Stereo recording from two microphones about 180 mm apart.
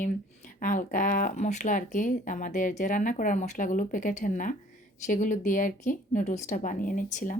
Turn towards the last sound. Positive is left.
turn(degrees=50)  # may be behind; listen again after turning